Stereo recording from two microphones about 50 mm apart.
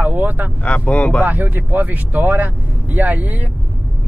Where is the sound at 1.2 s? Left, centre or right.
Right.